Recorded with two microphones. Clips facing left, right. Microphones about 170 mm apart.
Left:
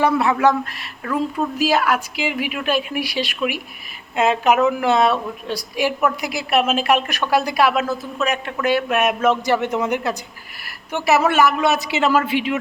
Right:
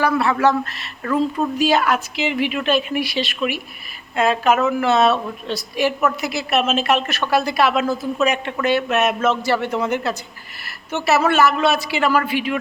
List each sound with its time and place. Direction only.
0.0 s speech: 15° left (ahead or behind)